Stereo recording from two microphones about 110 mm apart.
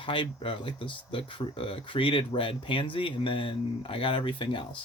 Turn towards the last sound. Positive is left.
turn(degrees=50)  # may be behind; listen again after turning